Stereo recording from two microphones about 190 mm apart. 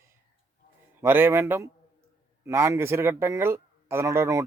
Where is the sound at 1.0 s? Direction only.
10° right (ahead or behind).